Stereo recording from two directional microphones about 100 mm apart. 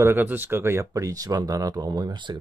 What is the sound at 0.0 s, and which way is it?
Speech, 20° right (ahead or behind).